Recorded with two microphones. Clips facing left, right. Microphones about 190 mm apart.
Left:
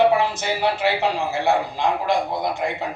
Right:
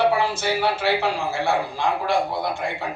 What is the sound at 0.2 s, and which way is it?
A man's voice, 20° left (ahead or behind).